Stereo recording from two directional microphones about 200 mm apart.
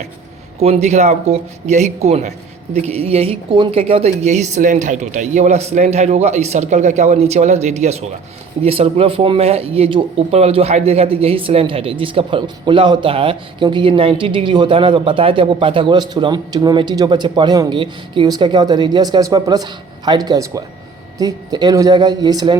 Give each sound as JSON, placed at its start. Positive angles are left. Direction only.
{"t": 0.6, "sound": "speech", "side_deg": -30}